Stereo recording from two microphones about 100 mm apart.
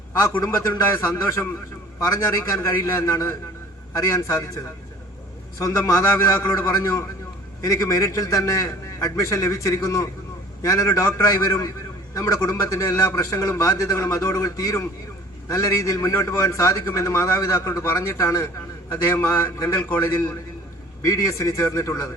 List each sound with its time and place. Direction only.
0.1 s a man's voice: 30° left (ahead or behind)